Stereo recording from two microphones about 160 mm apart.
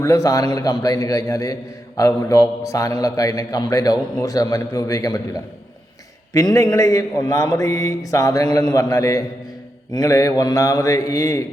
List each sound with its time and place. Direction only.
0.0 s a man's voice: 20° left (ahead or behind)